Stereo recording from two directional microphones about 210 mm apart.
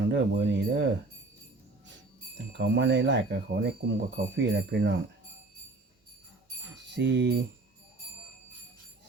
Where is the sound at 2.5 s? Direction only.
55° right (ahead or behind).